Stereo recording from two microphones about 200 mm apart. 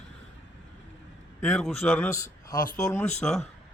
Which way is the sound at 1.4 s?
Centre (ahead or behind).